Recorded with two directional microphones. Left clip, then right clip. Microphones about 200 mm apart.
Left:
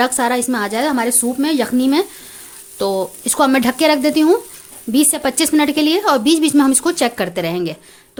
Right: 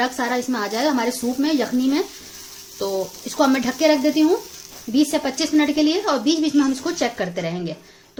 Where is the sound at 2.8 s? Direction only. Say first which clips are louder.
Left 6 dB; 55° left (ahead or behind).